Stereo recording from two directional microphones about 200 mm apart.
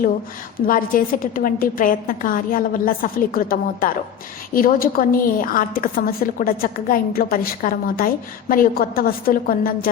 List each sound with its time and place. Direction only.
0.7 s a woman's voice: 45° left (ahead or behind)